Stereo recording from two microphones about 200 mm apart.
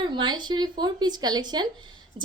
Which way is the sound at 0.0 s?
25° right (ahead or behind).